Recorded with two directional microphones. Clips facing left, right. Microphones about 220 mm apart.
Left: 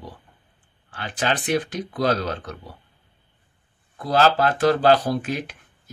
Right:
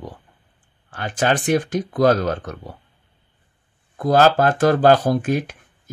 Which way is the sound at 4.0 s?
45° right (ahead or behind).